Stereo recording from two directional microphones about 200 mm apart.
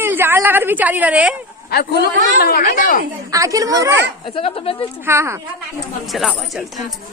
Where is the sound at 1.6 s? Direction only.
50° left (ahead or behind).